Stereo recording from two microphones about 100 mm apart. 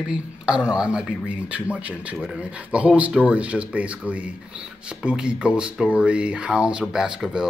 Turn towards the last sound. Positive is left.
turn(degrees=-5)  # may be behind; listen again after turning